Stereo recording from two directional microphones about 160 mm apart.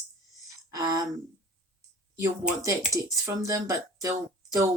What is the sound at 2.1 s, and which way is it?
Speech, 20° right (ahead or behind).